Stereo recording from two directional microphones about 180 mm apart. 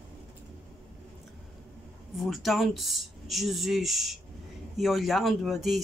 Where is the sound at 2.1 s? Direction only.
Centre (ahead or behind).